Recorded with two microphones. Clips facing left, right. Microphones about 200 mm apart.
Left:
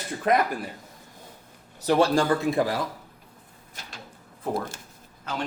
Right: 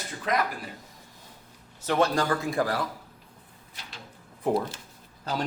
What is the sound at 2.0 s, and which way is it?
Speech, 25° left (ahead or behind).